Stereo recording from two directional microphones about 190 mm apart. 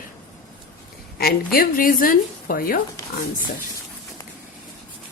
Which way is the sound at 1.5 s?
50° left (ahead or behind).